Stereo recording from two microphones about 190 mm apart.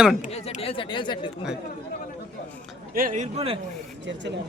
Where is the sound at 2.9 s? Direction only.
45° right (ahead or behind).